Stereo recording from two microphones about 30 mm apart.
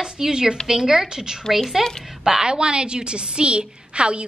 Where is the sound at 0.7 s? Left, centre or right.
Centre.